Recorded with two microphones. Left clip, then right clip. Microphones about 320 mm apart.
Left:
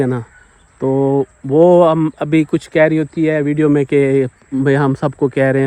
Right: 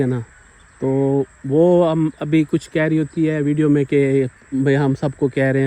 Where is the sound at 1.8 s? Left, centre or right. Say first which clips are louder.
Left 6 dB; centre.